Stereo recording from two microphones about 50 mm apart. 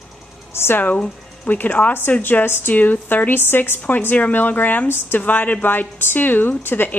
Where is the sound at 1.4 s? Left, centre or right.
Left.